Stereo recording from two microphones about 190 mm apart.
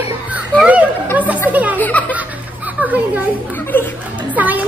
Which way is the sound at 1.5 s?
10° right (ahead or behind).